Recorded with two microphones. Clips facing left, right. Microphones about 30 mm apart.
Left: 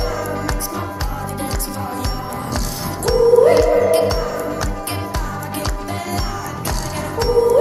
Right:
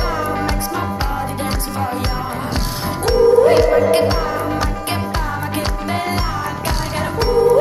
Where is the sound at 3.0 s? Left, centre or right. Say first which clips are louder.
Even; right.